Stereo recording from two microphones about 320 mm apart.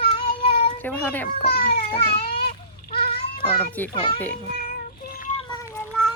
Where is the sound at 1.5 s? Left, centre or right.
Left.